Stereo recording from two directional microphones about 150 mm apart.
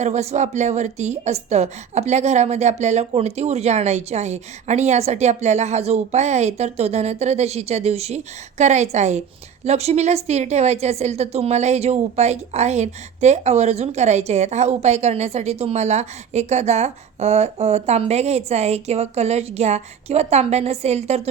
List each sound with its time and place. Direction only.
0.0 s a woman's voice: 45° right (ahead or behind)